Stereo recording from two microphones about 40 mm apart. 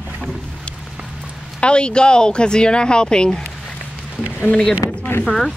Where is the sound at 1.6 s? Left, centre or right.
Left.